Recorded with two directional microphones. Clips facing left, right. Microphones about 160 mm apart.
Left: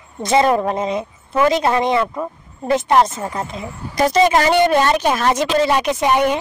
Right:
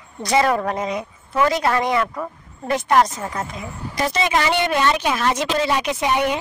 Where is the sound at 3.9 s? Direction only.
40° left (ahead or behind).